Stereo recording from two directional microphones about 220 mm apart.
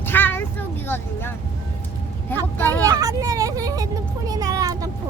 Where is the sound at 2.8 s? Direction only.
15° right (ahead or behind).